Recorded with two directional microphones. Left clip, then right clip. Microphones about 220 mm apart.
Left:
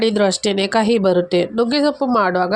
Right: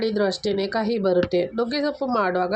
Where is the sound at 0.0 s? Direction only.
30° left (ahead or behind).